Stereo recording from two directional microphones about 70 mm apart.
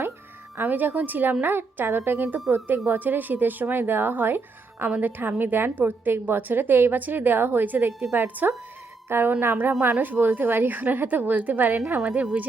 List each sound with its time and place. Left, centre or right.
0.5 s a woman's voice: right